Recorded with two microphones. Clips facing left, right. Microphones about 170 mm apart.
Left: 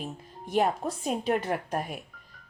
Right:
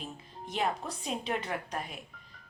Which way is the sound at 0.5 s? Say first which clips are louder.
Left 7 dB; 50° left (ahead or behind).